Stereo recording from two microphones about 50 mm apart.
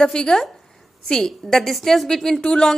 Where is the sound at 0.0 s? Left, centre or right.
Centre.